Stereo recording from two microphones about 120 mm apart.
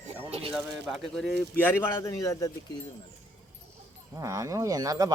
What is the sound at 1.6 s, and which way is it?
Speech, 20° left (ahead or behind).